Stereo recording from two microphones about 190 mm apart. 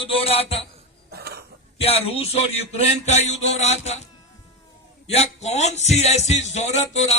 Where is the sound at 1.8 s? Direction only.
30° left (ahead or behind).